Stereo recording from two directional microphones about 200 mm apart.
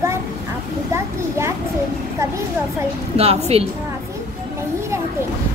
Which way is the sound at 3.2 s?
30° right (ahead or behind).